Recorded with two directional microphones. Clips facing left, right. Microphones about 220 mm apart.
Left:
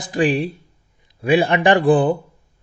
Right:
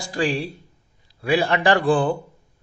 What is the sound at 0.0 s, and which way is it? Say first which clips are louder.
A man's voice: left 5 dB; 20° left (ahead or behind).